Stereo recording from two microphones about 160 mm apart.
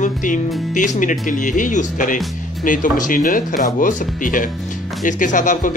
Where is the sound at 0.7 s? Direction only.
50° left (ahead or behind).